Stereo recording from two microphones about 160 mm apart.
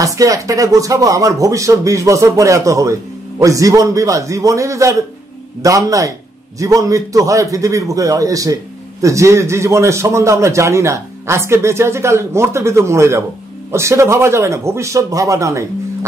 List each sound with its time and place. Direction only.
0.0 s a man's voice: 20° right (ahead or behind)